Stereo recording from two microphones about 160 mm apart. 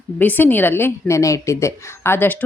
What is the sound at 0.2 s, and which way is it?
A woman's voice, 10° left (ahead or behind).